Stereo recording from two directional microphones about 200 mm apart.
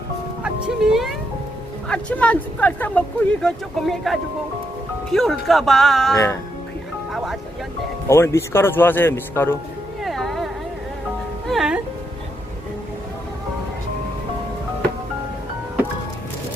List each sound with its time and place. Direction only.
0.4 s music: 5° right (ahead or behind)
1.9 s speech: 5° left (ahead or behind)
6.1 s speech: 15° left (ahead or behind)
8.0 s speech: 15° left (ahead or behind)
10.0 s a sound: centre (ahead or behind)
11.4 s music: centre (ahead or behind)